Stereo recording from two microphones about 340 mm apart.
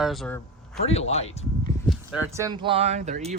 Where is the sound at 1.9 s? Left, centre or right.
Centre.